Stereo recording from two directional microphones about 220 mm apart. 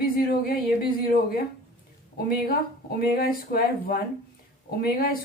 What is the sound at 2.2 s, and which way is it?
A woman's voice, 40° left (ahead or behind).